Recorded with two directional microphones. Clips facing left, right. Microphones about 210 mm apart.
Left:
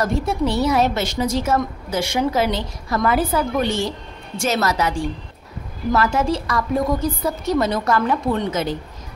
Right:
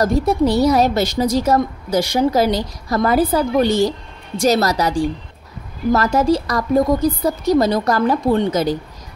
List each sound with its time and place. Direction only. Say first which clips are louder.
0.0 s a woman's voice: right 5 dB; 40° right (ahead or behind)